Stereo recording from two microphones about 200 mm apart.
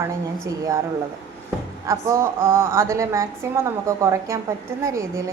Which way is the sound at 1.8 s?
15° right (ahead or behind).